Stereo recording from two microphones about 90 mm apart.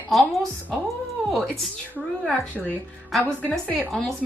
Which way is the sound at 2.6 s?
Centre (ahead or behind).